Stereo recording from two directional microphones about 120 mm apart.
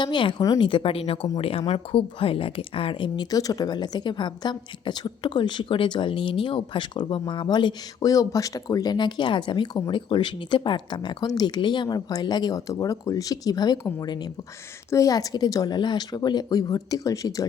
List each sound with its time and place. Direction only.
0.0 s speech: 40° left (ahead or behind)
0.7 s speech: 50° left (ahead or behind); by 17.4 s 30° left (ahead or behind)